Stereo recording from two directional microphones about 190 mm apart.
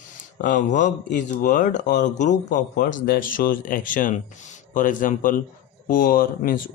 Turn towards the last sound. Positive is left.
turn(degrees=50)  # may be behind; listen again after turning